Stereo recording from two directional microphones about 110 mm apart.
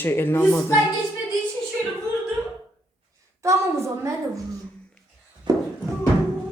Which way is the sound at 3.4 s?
25° right (ahead or behind).